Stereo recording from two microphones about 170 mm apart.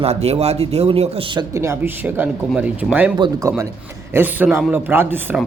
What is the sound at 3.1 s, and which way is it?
Speech, 25° right (ahead or behind).